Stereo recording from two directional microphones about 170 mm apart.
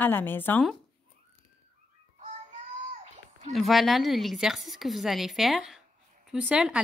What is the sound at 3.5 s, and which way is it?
Speech, centre (ahead or behind).